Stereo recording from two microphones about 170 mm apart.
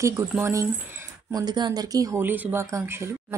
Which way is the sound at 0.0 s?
15° right (ahead or behind).